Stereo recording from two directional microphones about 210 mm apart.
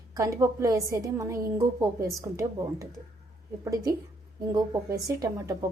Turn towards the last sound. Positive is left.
turn(degrees=-15)  # may be behind; listen again after turning